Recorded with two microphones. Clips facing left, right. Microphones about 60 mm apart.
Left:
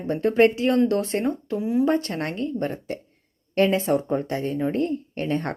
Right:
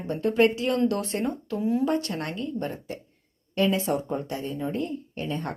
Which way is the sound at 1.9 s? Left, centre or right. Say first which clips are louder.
Left 4 dB; left.